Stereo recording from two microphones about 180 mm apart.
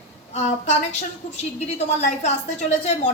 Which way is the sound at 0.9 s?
40° left (ahead or behind).